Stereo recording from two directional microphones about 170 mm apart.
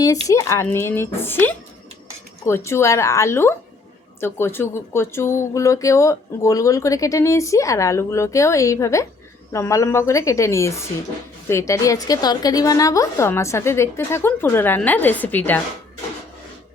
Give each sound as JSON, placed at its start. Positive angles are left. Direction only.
{"t": 0.0, "sound": "speech", "side_deg": 20}
{"t": 2.6, "sound": "speech", "side_deg": 15}